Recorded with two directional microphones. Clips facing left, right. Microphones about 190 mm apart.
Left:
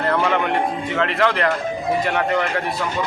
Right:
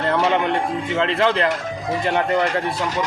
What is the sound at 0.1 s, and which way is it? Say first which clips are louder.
Music: right 2 dB; 30° right (ahead or behind).